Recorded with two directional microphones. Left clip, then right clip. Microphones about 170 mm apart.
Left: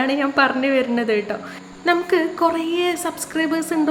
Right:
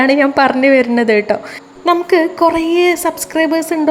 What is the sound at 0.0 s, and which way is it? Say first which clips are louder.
A woman's voice: right 7 dB; 35° right (ahead or behind).